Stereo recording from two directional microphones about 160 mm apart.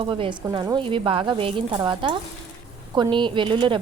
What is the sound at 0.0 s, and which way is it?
Speech, 35° right (ahead or behind).